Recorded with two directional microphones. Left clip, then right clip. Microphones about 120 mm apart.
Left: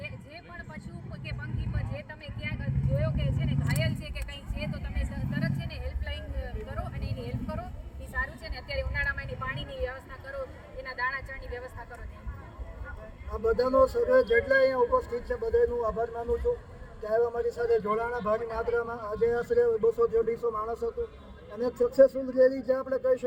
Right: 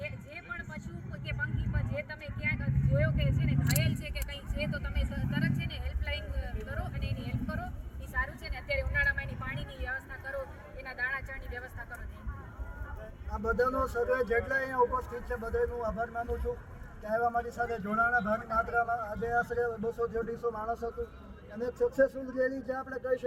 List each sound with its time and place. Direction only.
0.0 s vehicle: 5° right (ahead or behind)
8.1 s a sound: 10° left (ahead or behind)
10.8 s vehicle: 10° left (ahead or behind)
13.4 s a man's voice: 20° left (ahead or behind)